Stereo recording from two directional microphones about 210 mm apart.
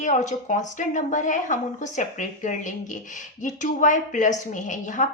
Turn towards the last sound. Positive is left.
turn(degrees=35)  # may be behind; listen again after turning